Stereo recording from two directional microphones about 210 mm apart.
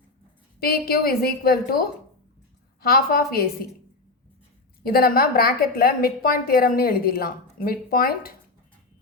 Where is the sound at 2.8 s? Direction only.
45° left (ahead or behind).